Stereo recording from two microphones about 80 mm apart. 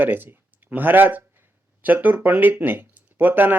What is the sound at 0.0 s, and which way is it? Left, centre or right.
Speech, right.